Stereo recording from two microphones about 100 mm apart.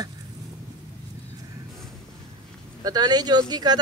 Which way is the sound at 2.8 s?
45° right (ahead or behind).